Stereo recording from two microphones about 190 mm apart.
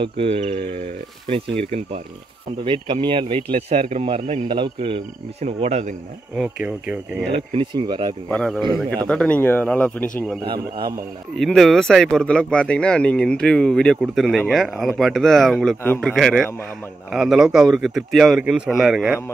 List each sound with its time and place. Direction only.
0.0 s speech: 30° right (ahead or behind)
2.6 s speech: 25° right (ahead or behind)
6.3 s speech: 5° right (ahead or behind)
7.3 s speech: 25° right (ahead or behind)
8.3 s speech: 5° left (ahead or behind)
10.4 s speech: 25° right (ahead or behind)
11.3 s speech: centre (ahead or behind)